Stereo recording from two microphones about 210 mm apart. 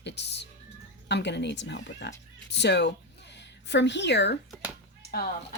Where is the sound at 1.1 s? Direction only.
55° left (ahead or behind).